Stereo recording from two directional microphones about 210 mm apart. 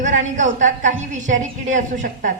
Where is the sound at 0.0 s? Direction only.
35° right (ahead or behind).